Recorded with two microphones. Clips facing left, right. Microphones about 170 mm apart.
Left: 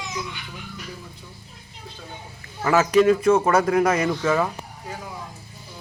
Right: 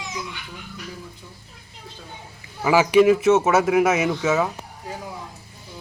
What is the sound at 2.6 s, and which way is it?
Speech, 10° right (ahead or behind).